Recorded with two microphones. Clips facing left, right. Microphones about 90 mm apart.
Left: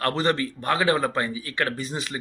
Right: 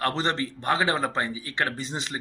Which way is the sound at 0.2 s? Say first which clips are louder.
Left 3 dB; 30° right (ahead or behind).